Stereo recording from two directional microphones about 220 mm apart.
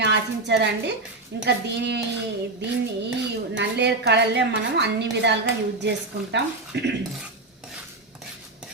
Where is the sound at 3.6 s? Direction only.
50° right (ahead or behind).